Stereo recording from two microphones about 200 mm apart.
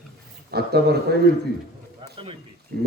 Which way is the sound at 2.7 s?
50° right (ahead or behind).